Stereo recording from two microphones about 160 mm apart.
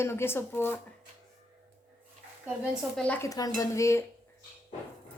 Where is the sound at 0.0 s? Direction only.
15° left (ahead or behind).